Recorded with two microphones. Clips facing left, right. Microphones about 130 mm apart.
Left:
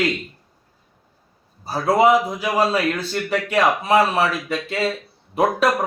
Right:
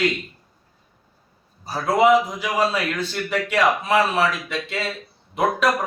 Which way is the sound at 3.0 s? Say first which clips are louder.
Left 1 dB; 35° left (ahead or behind).